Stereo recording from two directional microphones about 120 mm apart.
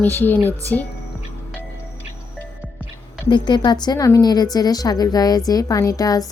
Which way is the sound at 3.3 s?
40° left (ahead or behind).